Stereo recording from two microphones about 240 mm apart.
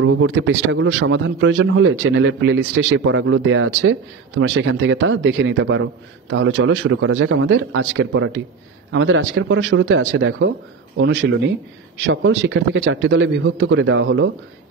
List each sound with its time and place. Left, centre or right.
0.0 s a man's voice: right